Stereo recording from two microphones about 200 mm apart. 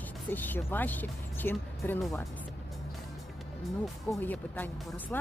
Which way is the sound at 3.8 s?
5° left (ahead or behind).